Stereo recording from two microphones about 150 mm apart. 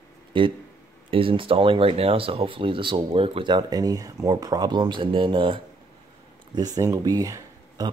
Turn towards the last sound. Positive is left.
turn(degrees=-25)  # may be behind; listen again after turning